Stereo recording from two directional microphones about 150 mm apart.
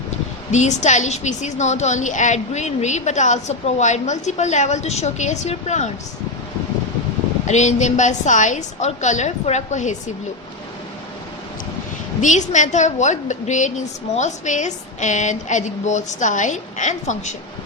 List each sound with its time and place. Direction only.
0.5 s a woman's voice: 50° left (ahead or behind)
7.4 s a woman's voice: 50° left (ahead or behind)
12.2 s a woman's voice: 55° left (ahead or behind)